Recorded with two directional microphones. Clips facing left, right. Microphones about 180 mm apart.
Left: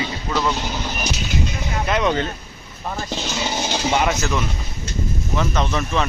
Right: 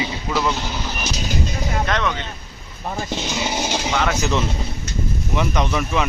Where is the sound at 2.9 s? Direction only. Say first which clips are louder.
Right 1 dB; 10° right (ahead or behind).